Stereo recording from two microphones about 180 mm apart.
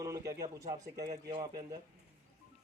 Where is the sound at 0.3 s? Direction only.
20° right (ahead or behind).